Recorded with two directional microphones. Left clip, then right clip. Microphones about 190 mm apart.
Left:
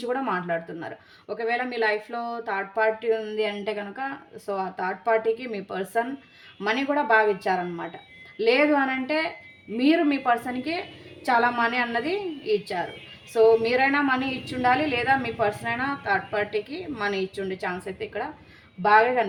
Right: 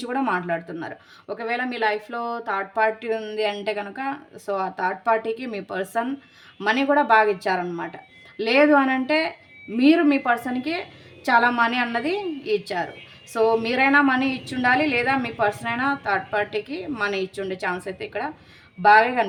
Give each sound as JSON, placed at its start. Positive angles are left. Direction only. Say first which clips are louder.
{"t": 0.0, "sound": "speech", "louder": "right 2 dB", "side_deg": -35}